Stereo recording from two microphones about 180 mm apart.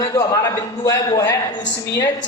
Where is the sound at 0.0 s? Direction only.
20° left (ahead or behind).